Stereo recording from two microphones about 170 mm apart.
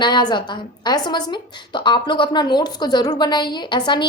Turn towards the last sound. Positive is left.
turn(degrees=25)  # may be behind; listen again after turning